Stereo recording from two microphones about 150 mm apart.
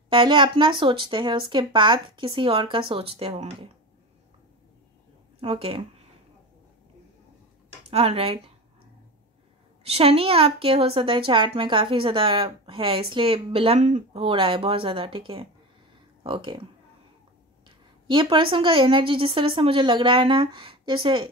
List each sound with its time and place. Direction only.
0.1 s a woman's voice: 30° right (ahead or behind)
5.4 s a woman's voice: 40° right (ahead or behind)
7.9 s a woman's voice: 40° right (ahead or behind)
9.8 s a woman's voice: 40° right (ahead or behind)
17.6 s a woman's voice: 35° right (ahead or behind)